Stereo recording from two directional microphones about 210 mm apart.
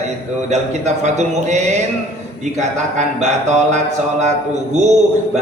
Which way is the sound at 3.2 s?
35° right (ahead or behind).